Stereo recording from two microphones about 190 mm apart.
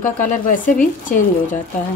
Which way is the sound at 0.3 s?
45° left (ahead or behind).